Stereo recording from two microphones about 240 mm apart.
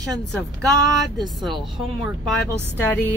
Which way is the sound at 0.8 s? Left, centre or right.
Centre.